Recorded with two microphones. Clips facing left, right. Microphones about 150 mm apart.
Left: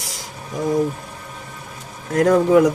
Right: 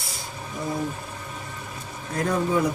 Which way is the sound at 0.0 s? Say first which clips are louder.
Left 2 dB; 90° left.